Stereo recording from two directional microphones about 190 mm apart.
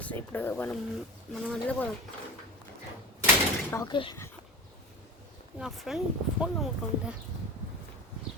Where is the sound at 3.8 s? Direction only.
25° left (ahead or behind).